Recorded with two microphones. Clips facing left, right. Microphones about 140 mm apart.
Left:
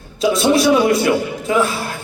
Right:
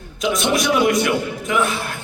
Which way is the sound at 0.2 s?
30° left (ahead or behind).